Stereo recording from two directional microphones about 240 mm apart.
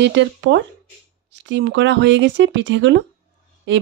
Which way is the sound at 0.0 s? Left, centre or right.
Right.